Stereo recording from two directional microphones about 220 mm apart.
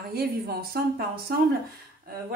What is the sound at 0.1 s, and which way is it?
A woman's voice, 45° right (ahead or behind).